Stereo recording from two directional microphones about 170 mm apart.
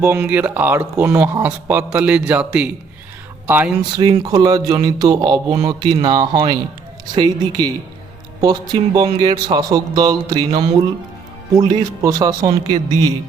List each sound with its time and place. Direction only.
0.0 s speech: 10° right (ahead or behind)
3.9 s speech: 25° right (ahead or behind)